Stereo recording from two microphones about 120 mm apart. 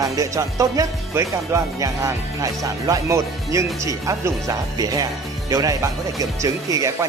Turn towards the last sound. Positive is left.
turn(degrees=-25)  # may be behind; listen again after turning